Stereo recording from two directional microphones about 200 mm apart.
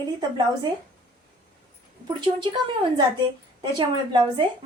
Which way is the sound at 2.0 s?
25° right (ahead or behind).